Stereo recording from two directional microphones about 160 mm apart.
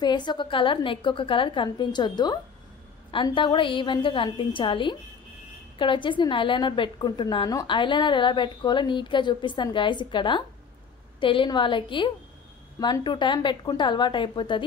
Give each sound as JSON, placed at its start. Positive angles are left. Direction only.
{"t": 0.0, "sound": "a woman's voice", "side_deg": 25}